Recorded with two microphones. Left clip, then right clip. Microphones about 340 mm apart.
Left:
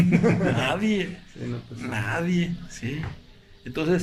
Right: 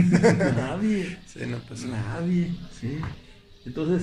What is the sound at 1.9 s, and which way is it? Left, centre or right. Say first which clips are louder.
Speech: left 5 dB; left.